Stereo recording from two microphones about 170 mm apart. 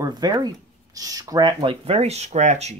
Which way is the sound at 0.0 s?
25° right (ahead or behind).